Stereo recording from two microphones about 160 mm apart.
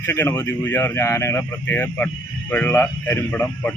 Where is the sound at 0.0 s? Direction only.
15° left (ahead or behind).